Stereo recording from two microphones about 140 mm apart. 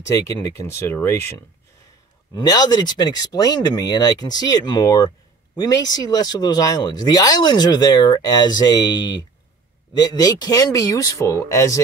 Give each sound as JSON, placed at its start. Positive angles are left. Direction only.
{"t": 0.0, "sound": "speech", "side_deg": 25}
{"t": 2.3, "sound": "speech", "side_deg": 30}